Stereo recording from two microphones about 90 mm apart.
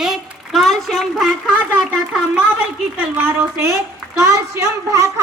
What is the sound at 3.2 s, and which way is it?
A woman's voice, 25° right (ahead or behind).